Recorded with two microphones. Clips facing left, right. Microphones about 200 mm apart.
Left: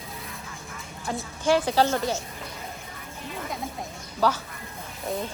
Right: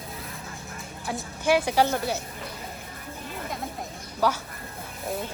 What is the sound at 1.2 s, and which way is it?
A woman's voice, 15° right (ahead or behind).